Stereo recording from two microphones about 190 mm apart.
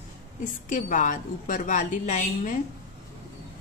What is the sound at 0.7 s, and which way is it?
A woman's voice, 40° left (ahead or behind).